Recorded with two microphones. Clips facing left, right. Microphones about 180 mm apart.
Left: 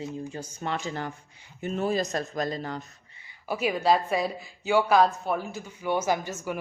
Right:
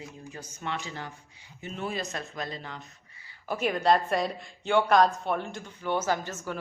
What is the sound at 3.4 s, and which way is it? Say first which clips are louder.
A woman's voice: left 1 dB; 5° left (ahead or behind).